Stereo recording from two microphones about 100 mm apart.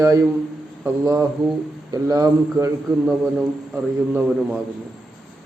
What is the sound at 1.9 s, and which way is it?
Speech, 40° right (ahead or behind).